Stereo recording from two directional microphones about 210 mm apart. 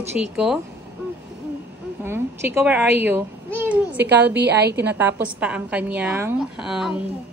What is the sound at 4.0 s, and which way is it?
Speech, 55° right (ahead or behind).